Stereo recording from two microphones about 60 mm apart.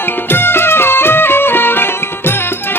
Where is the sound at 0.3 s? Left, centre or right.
Left.